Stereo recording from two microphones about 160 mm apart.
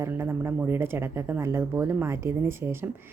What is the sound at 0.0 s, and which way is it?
A woman's voice, 15° right (ahead or behind).